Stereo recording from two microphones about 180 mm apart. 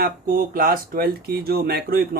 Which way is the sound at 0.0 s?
55° right (ahead or behind).